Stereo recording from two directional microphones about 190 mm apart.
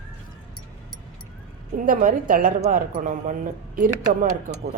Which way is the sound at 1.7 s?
45° right (ahead or behind).